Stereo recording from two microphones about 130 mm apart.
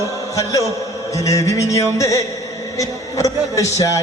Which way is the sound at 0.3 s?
25° left (ahead or behind).